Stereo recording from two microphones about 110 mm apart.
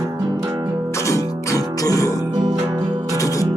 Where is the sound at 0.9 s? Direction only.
25° left (ahead or behind).